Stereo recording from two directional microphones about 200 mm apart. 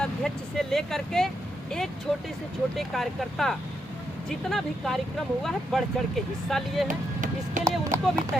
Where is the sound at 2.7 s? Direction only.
Centre (ahead or behind).